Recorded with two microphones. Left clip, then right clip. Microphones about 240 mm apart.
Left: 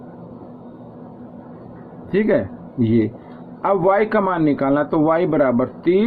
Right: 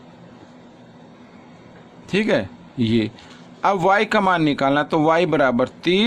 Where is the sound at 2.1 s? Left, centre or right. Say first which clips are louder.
Left 2 dB; right.